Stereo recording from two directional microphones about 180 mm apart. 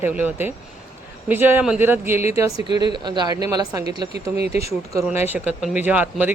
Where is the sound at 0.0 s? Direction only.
10° right (ahead or behind).